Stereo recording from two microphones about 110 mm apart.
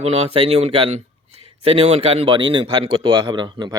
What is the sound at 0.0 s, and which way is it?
Speech, 70° right (ahead or behind).